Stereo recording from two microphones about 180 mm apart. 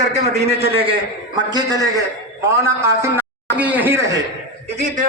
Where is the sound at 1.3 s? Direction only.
20° right (ahead or behind).